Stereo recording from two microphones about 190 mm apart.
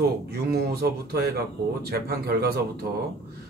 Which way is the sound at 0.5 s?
55° right (ahead or behind).